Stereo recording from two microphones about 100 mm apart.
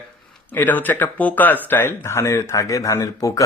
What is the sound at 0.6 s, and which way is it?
Speech, 20° left (ahead or behind).